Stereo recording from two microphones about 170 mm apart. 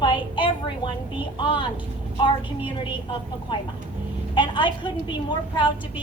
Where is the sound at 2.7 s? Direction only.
30° left (ahead or behind).